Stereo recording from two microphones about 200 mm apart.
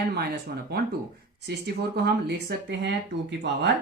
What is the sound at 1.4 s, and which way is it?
Speech, 55° right (ahead or behind).